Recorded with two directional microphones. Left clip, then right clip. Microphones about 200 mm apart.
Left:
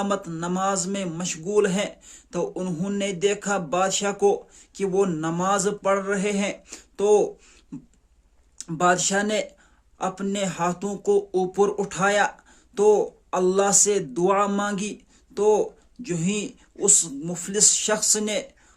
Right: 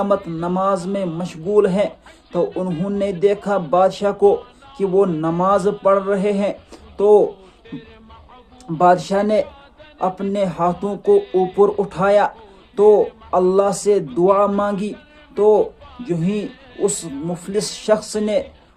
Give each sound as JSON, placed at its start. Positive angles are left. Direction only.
{"t": 0.2, "sound": "music", "side_deg": 40}
{"t": 0.4, "sound": "speech", "side_deg": 20}
{"t": 8.8, "sound": "speech", "side_deg": 20}